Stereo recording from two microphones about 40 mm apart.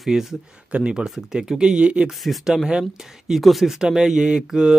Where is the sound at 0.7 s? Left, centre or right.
Right.